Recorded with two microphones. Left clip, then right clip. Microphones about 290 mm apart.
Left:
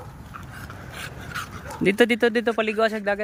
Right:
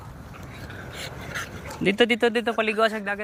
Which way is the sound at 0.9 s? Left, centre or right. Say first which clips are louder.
Left 1 dB; centre.